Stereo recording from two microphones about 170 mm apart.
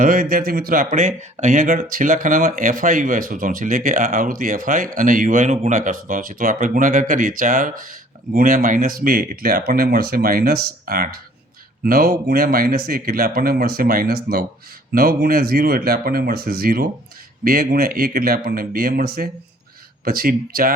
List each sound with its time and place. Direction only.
0.0 s speech: 55° right (ahead or behind)